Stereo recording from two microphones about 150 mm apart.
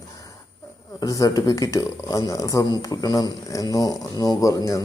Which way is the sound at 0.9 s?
25° left (ahead or behind).